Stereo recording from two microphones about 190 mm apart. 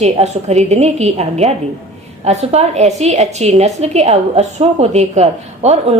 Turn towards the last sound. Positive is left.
turn(degrees=-35)  # may be behind; listen again after turning